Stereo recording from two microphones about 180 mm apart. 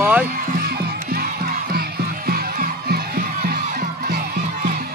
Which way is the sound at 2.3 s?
55° right (ahead or behind).